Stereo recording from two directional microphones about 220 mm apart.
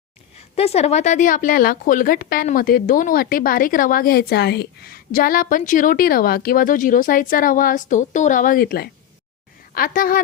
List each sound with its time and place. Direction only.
0.5 s a woman's voice: 30° left (ahead or behind)